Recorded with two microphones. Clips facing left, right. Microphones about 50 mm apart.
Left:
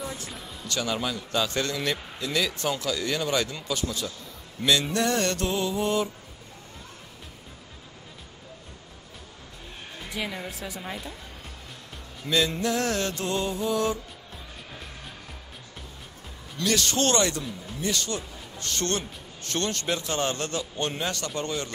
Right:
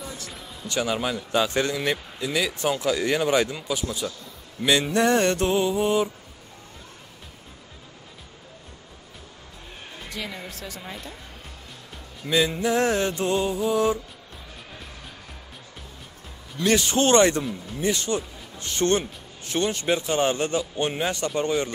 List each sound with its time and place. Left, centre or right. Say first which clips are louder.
0.7 s a man's voice: right 3 dB; centre
4.6 s mantra: right 4 dB; centre
10.0 s speech: left 2 dB; centre
12.3 s a man's voice: right 3 dB; centre
16.6 s mantra: right 4 dB; right
17.7 s a man's voice: right 5 dB; right
21.4 s mantra: right 9 dB; right